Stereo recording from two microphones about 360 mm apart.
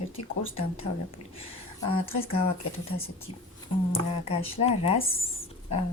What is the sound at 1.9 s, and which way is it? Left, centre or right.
Speech, centre.